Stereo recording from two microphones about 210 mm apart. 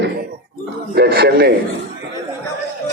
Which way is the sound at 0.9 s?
50° right (ahead or behind).